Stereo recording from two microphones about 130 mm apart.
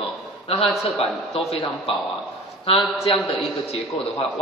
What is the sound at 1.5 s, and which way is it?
Speech, 45° left (ahead or behind).